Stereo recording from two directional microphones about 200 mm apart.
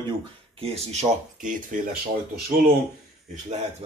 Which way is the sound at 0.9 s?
40° right (ahead or behind).